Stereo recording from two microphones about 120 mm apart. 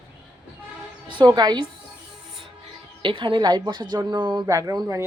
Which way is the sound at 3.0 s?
45° right (ahead or behind).